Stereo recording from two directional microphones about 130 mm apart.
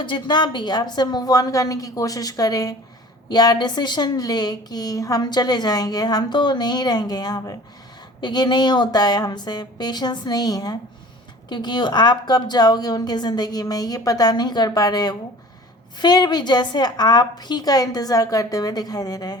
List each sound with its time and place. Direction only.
0.0 s a woman's voice: 35° left (ahead or behind)